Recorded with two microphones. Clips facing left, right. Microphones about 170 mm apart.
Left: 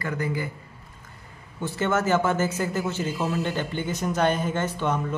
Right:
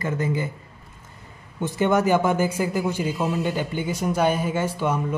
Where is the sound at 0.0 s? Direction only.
20° right (ahead or behind).